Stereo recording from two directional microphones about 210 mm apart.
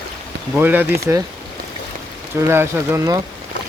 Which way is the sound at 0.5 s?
10° right (ahead or behind).